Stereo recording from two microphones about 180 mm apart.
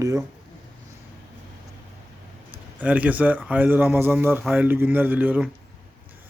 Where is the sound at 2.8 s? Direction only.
10° right (ahead or behind).